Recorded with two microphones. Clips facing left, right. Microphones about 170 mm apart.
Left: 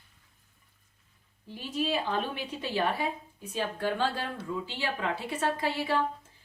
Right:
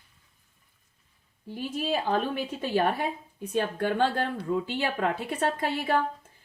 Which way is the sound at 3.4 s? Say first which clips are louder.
Right 4 dB; 60° right (ahead or behind).